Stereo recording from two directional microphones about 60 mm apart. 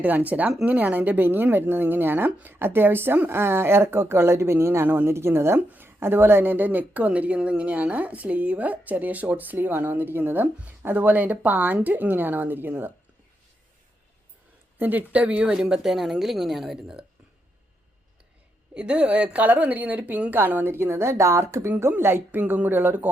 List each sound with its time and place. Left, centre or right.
0.0 s a woman's voice: right
14.8 s speech: right
15.5 s a woman's voice: centre
16.8 s speech: centre
18.7 s speech: centre; by 21.7 s right
21.7 s a woman's voice: right
22.4 s a woman's voice: right